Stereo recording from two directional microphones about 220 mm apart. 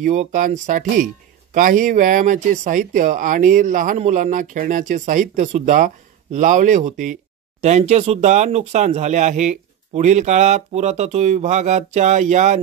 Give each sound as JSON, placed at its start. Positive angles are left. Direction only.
{"t": 0.0, "sound": "speech", "side_deg": -35}